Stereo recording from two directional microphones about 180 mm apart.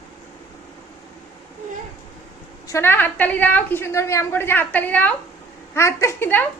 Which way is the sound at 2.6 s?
15° left (ahead or behind).